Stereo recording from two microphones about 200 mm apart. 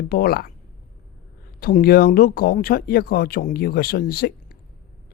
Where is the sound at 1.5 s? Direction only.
50° left (ahead or behind).